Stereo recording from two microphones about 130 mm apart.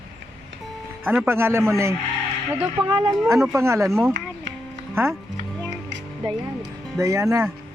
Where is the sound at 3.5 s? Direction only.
20° right (ahead or behind).